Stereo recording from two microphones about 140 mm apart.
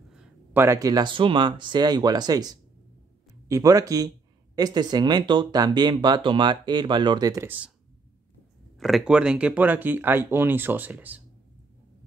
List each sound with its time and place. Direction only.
0.1 s speech: 15° right (ahead or behind)
7.4 s speech: 10° right (ahead or behind)
8.7 s speech: centre (ahead or behind)